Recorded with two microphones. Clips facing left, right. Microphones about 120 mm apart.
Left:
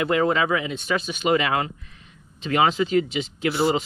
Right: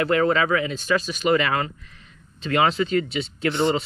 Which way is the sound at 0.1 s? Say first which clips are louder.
Right 1 dB; 20° left (ahead or behind).